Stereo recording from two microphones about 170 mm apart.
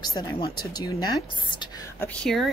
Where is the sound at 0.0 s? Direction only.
25° left (ahead or behind).